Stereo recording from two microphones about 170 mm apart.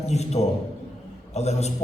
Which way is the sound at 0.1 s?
40° left (ahead or behind).